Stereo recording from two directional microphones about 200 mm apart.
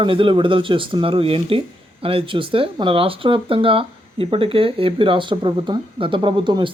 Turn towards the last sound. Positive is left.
turn(degrees=-25)  # may be behind; listen again after turning